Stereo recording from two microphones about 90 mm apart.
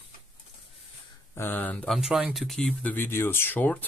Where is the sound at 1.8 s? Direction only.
Centre (ahead or behind).